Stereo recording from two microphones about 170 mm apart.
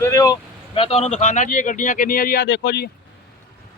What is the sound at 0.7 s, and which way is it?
Speech, 35° left (ahead or behind).